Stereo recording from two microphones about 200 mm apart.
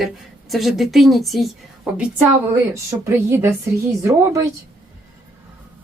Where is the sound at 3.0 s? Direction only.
15° right (ahead or behind).